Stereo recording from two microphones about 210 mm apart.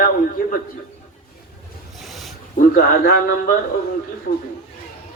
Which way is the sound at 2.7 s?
45° left (ahead or behind).